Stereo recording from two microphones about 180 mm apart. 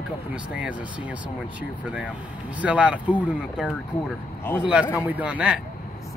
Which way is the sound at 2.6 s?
5° right (ahead or behind).